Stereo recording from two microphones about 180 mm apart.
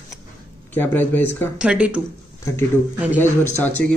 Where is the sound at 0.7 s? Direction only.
10° left (ahead or behind).